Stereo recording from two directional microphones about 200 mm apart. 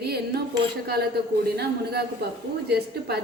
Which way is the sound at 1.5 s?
55° right (ahead or behind).